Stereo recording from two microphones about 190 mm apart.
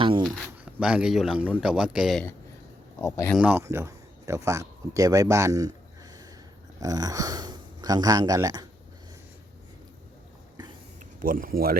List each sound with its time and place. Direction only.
0.0 s a sound: 25° right (ahead or behind)
0.6 s a man's voice: 5° right (ahead or behind)
3.0 s a man's voice: 15° left (ahead or behind)
3.3 s speech: 10° right (ahead or behind)
11.0 s speech: 45° right (ahead or behind)